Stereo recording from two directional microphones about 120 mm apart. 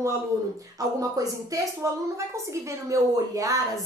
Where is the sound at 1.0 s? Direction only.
30° right (ahead or behind).